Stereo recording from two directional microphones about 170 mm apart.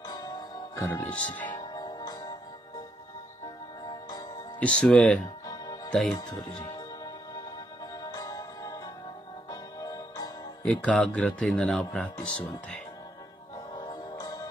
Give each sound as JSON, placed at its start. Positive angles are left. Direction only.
{"t": 0.1, "sound": "music", "side_deg": 20}
{"t": 1.0, "sound": "speech", "side_deg": 10}
{"t": 1.5, "sound": "music", "side_deg": 25}
{"t": 4.6, "sound": "speech", "side_deg": 5}
{"t": 8.0, "sound": "music", "side_deg": 20}
{"t": 10.6, "sound": "speech", "side_deg": 10}
{"t": 13.7, "sound": "music", "side_deg": 25}